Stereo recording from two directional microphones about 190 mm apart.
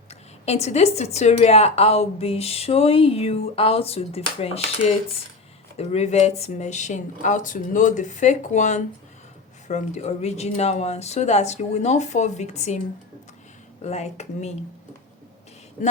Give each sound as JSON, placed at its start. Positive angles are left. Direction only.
{"t": 0.1, "sound": "a woman's voice", "side_deg": 35}
{"t": 13.8, "sound": "a woman's voice", "side_deg": 35}